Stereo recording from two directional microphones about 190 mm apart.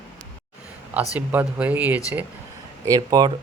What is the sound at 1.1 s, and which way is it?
Speech, 10° right (ahead or behind).